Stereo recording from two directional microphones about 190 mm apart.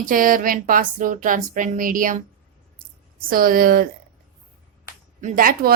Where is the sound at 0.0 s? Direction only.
45° right (ahead or behind).